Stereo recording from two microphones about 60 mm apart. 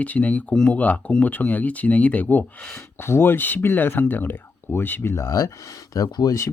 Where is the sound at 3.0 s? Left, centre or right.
Left.